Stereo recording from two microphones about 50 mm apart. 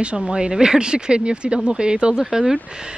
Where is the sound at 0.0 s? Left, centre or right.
Right.